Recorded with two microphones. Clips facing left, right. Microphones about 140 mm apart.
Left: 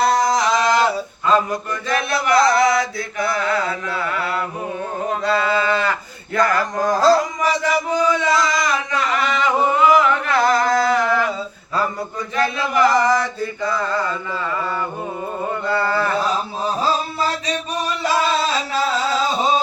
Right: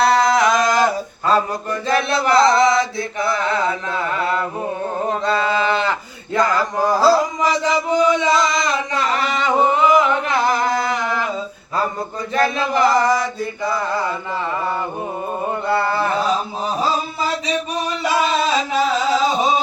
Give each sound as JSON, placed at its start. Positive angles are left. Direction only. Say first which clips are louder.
{"t": 0.0, "sound": "a sound", "louder": "right 2 dB", "side_deg": -65}
{"t": 1.9, "sound": "chant", "louder": "right 2 dB", "side_deg": -30}
{"t": 6.3, "sound": "mantra", "louder": "right 1 dB", "side_deg": -15}
{"t": 7.6, "sound": "chant", "louder": "right 3 dB", "side_deg": -20}
{"t": 12.4, "sound": "chant", "louder": "right 2 dB", "side_deg": -25}
{"t": 12.9, "sound": "mantra", "louder": "even", "side_deg": -15}
{"t": 15.7, "sound": "chant", "louder": "right 1 dB", "side_deg": -20}
{"t": 18.0, "sound": "a sound", "louder": "right 1 dB", "side_deg": -15}